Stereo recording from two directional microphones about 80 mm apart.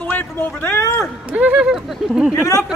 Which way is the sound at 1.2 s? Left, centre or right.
Centre.